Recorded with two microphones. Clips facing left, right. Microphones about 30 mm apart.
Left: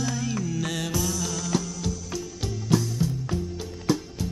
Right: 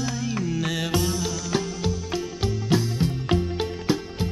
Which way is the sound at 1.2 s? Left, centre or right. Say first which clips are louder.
Right 2 dB; right.